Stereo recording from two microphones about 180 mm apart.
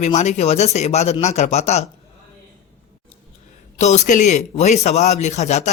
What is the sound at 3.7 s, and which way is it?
A man's voice, 40° left (ahead or behind).